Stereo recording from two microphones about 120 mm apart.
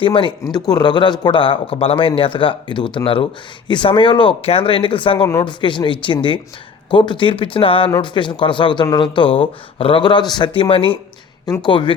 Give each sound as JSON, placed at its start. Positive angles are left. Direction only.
{"t": 0.0, "sound": "speech", "side_deg": 45}
{"t": 0.5, "sound": "a man's voice", "side_deg": 35}